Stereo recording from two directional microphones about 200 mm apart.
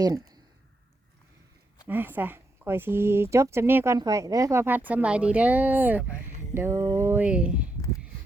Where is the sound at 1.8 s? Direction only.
10° right (ahead or behind).